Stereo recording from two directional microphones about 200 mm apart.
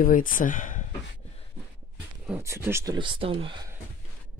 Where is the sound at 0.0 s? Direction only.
45° left (ahead or behind).